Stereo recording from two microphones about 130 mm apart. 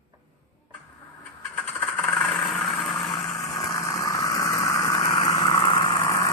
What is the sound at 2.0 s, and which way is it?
Vehicle, centre (ahead or behind).